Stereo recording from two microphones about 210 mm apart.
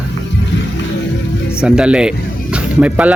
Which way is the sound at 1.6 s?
5° right (ahead or behind).